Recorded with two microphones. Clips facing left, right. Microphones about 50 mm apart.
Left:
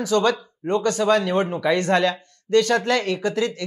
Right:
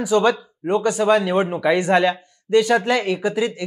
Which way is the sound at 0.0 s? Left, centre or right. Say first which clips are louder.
Right 2 dB; centre.